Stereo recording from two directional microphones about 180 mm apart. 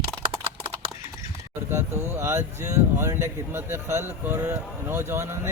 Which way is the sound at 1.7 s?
15° right (ahead or behind).